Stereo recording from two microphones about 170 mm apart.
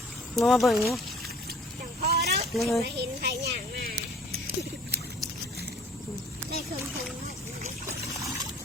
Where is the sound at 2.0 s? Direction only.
70° right (ahead or behind).